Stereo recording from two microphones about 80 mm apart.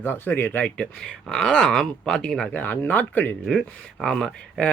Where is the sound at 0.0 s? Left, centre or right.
Left.